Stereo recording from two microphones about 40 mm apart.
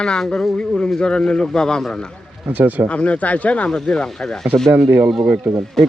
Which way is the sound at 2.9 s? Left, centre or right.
Left.